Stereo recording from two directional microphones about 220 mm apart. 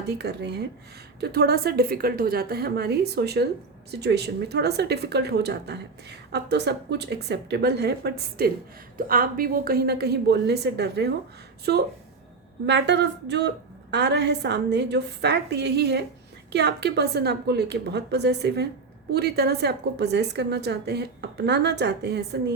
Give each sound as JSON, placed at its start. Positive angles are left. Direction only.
{"t": 0.0, "sound": "speech", "side_deg": -50}